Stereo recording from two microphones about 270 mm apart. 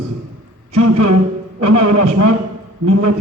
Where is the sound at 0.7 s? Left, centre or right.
Right.